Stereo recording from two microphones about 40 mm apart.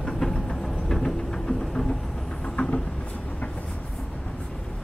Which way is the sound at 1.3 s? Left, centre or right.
Centre.